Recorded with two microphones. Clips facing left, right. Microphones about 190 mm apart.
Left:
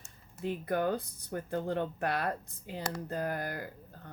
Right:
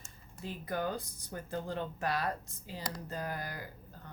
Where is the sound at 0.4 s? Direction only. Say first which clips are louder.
Left 5 dB; 60° left (ahead or behind).